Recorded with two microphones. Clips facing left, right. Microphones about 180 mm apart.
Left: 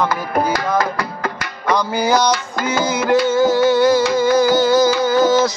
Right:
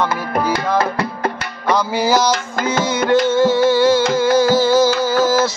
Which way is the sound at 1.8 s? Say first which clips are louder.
Even; 5° right (ahead or behind).